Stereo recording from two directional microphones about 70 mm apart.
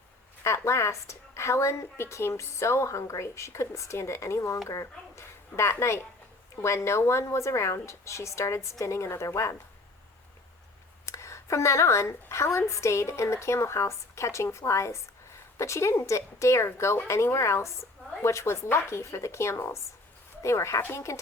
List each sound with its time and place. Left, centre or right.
0.4 s a woman's voice: left
11.0 s a woman's voice: left